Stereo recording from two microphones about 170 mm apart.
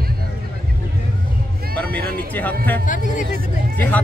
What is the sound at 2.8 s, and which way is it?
Speech, 50° left (ahead or behind).